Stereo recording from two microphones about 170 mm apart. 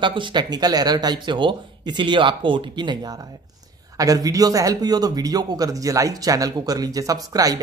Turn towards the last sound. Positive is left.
turn(degrees=-20)  # may be behind; listen again after turning